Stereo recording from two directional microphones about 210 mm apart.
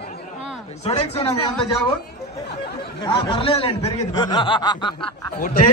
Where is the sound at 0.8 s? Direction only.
30° left (ahead or behind).